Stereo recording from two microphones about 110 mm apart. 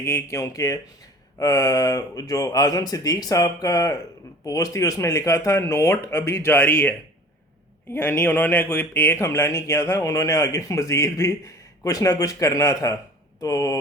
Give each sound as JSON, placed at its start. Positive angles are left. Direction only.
{"t": 0.0, "sound": "speech", "side_deg": 20}
{"t": 7.9, "sound": "speech", "side_deg": 20}